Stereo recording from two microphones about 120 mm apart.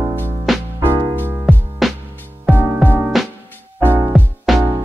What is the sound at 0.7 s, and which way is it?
Music, 30° right (ahead or behind).